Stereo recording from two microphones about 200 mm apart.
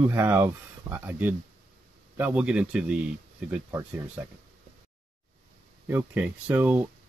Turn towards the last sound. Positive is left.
turn(degrees=-10)  # may be behind; listen again after turning